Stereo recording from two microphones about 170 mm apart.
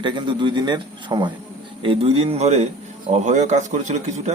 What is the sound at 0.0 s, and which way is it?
A man's voice, 30° right (ahead or behind).